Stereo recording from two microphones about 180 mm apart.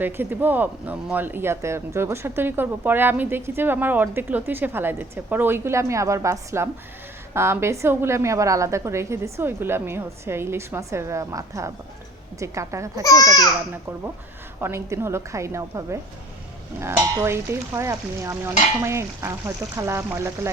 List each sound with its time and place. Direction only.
0.0 s speech: 10° right (ahead or behind)
13.0 s speech: 20° left (ahead or behind)
14.6 s speech: 15° right (ahead or behind)